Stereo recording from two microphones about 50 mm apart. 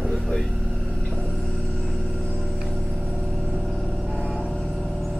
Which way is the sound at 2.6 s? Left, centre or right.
Centre.